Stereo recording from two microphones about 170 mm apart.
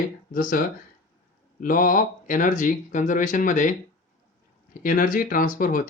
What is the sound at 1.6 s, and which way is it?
Speech, 55° left (ahead or behind).